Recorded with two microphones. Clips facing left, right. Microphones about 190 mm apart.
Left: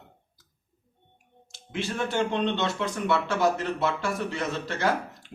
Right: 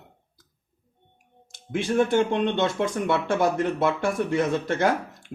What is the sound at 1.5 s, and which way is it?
Speech, 50° right (ahead or behind).